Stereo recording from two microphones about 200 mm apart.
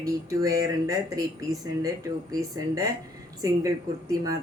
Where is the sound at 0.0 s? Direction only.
15° right (ahead or behind).